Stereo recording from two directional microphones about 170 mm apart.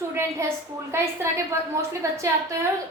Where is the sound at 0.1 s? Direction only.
15° right (ahead or behind).